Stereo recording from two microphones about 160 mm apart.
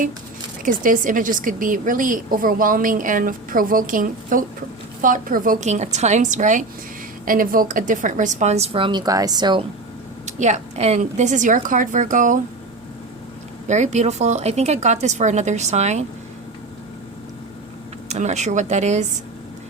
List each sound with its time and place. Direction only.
0.6 s a woman's voice: 55° right (ahead or behind)
7.3 s a woman's voice: 60° right (ahead or behind); by 9.6 s 30° right (ahead or behind)
10.2 s a woman's voice: 45° right (ahead or behind)
13.7 s a woman's voice: 45° right (ahead or behind)
18.1 s a woman's voice: 45° right (ahead or behind)